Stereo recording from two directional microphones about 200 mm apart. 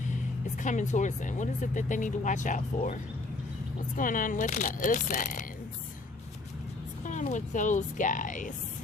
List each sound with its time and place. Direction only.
0.6 s speech: 40° left (ahead or behind)
7.0 s speech: 40° left (ahead or behind)